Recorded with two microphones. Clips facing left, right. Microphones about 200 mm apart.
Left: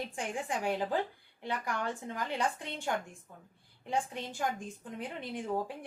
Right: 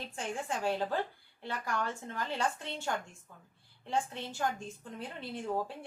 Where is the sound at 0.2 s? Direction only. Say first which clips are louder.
Right 1 dB; 15° left (ahead or behind).